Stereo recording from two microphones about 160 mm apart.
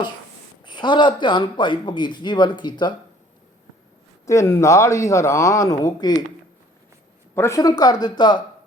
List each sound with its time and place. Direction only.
0.6 s a man's voice: 30° left (ahead or behind)
4.3 s a man's voice: 15° left (ahead or behind)
7.3 s a man's voice: 20° left (ahead or behind)